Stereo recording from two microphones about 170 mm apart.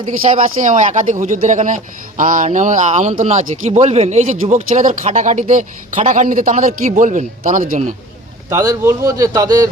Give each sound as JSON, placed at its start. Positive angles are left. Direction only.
{"t": 0.3, "sound": "speech", "side_deg": -50}
{"t": 8.4, "sound": "speech", "side_deg": -20}